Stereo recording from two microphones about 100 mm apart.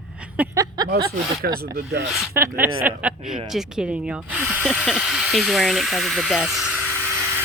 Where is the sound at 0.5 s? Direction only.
35° right (ahead or behind).